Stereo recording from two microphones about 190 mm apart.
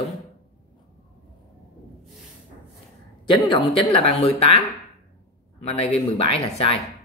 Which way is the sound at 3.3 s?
25° left (ahead or behind).